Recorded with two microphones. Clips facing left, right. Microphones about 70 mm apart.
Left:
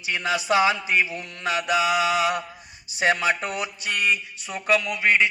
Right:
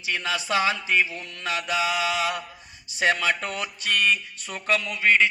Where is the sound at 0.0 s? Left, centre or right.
Left.